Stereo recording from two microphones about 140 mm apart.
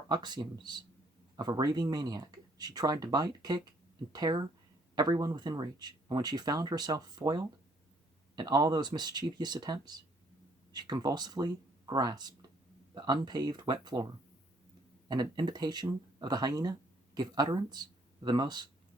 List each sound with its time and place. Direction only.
0.1 s speech: 30° right (ahead or behind)